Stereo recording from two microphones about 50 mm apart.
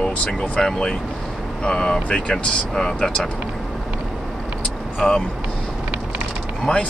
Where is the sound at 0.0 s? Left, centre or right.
Centre.